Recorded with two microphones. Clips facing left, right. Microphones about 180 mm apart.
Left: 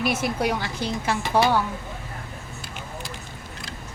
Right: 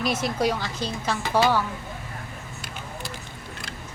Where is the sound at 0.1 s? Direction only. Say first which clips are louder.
Left 1 dB; 10° left (ahead or behind).